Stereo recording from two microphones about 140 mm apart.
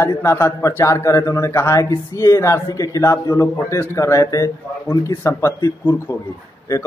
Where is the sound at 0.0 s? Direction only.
20° left (ahead or behind).